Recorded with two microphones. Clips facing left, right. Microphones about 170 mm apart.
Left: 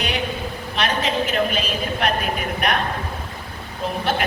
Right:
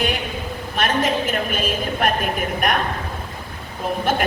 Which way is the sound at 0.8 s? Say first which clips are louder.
Right 2 dB; 50° right (ahead or behind).